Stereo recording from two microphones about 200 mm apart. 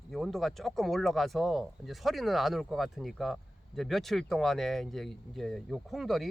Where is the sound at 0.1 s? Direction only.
Centre (ahead or behind).